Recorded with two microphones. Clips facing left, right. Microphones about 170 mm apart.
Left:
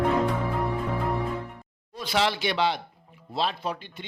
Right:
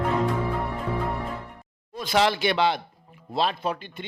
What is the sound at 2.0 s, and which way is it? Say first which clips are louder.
Speech: right 3 dB; 50° right (ahead or behind).